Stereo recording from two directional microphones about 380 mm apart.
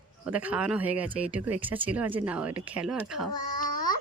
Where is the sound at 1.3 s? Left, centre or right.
Right.